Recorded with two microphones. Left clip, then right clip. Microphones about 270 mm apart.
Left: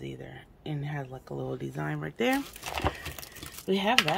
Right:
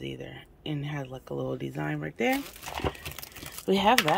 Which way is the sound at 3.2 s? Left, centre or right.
Centre.